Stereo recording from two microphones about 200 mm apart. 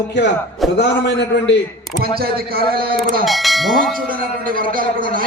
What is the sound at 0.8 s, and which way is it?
Speech, 60° left (ahead or behind).